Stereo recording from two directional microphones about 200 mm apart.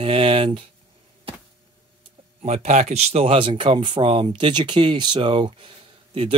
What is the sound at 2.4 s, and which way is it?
Speech, 35° right (ahead or behind).